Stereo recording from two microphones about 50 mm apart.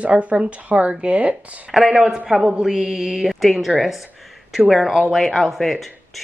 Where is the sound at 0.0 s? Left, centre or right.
Right.